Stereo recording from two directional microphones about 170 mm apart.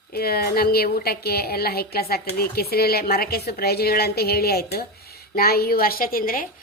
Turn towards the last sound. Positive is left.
turn(degrees=55)  # may be behind; listen again after turning